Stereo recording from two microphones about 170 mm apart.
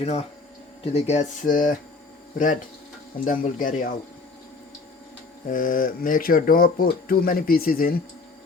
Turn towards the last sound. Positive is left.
turn(degrees=60)  # may be behind; listen again after turning